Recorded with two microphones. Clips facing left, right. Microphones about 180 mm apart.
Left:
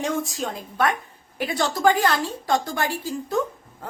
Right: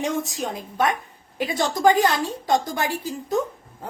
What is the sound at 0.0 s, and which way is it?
A woman's voice, 20° right (ahead or behind).